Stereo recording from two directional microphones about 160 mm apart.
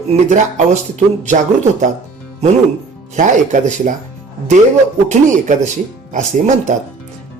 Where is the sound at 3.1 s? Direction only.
50° right (ahead or behind).